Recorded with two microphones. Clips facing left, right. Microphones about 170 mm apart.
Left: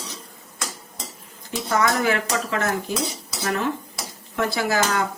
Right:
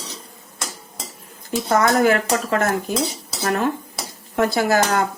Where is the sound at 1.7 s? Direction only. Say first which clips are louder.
Right 5 dB; 45° right (ahead or behind).